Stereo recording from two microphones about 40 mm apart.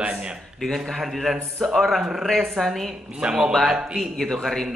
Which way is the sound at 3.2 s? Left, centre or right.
Centre.